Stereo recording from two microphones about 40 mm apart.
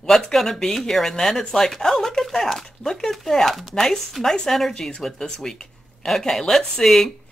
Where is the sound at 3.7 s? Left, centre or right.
Centre.